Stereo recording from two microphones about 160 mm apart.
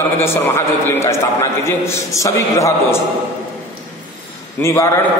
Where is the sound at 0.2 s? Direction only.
15° left (ahead or behind).